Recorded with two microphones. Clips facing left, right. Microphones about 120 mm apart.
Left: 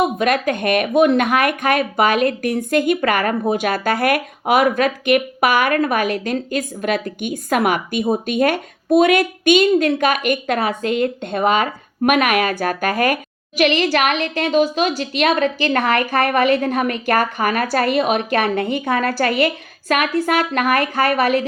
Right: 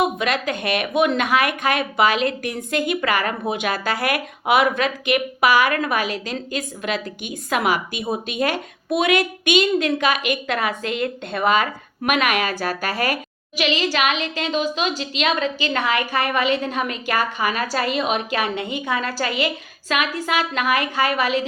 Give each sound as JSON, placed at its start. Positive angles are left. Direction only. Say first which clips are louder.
{"t": 0.2, "sound": "a woman's voice", "louder": "left 5 dB", "side_deg": 45}